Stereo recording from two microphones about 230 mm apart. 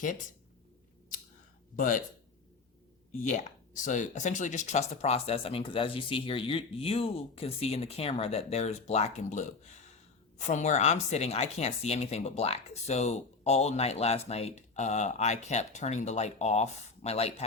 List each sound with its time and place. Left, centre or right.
1.7 s speech: left
3.2 s speech: left